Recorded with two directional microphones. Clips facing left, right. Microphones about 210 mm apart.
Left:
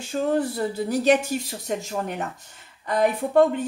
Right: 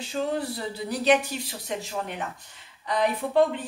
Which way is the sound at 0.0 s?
45° left (ahead or behind).